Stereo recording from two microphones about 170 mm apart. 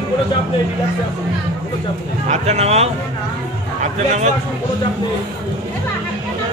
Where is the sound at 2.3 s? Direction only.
40° right (ahead or behind).